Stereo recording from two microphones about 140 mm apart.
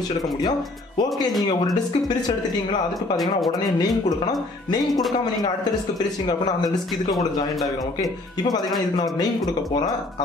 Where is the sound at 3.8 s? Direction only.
30° left (ahead or behind).